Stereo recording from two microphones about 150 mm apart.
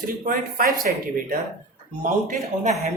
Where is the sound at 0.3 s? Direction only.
65° right (ahead or behind).